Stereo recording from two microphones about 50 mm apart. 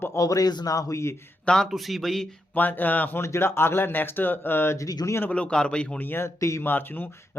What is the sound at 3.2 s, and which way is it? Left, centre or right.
Speech, left.